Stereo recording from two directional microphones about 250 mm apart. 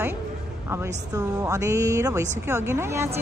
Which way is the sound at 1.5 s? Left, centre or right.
Centre.